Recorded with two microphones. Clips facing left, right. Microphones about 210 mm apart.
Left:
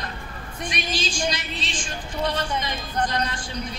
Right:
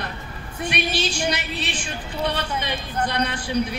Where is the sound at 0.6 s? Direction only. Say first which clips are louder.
Right 4 dB; 65° right (ahead or behind).